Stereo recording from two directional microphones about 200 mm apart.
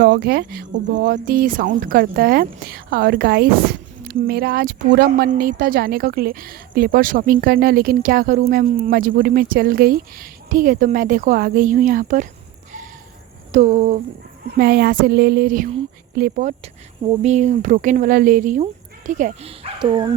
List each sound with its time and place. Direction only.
0.0 s speech: 50° right (ahead or behind)
13.5 s speech: 35° right (ahead or behind)
14.4 s speech: 50° right (ahead or behind)
17.1 s speech: 35° right (ahead or behind)